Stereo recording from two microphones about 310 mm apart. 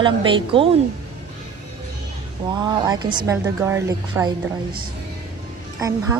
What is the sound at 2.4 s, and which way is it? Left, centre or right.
A woman's voice, centre.